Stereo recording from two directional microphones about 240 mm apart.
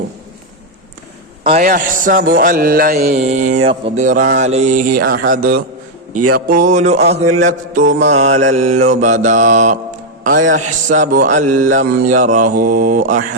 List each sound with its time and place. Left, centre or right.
1.5 s mantra: right
3.7 s mantra: right